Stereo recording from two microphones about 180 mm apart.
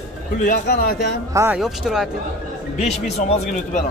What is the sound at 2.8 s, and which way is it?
Speech, 35° left (ahead or behind).